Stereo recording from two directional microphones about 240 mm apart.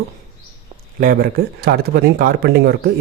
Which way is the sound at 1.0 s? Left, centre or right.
Right.